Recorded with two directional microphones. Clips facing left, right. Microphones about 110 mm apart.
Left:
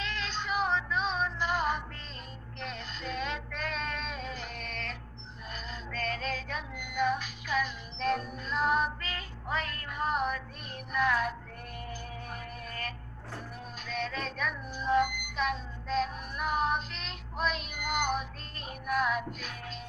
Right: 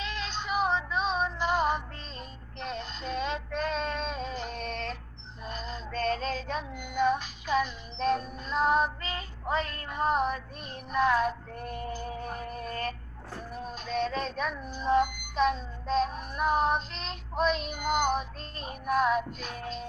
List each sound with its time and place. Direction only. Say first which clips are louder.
0.0 s music: right 1 dB; 20° right (ahead or behind)
2.6 s female singing: right 4 dB; 25° right (ahead or behind)
5.5 s music: right 4 dB; 25° right (ahead or behind)